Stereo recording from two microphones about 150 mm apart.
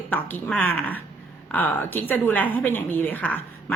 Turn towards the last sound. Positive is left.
turn(degrees=10)  # may be behind; listen again after turning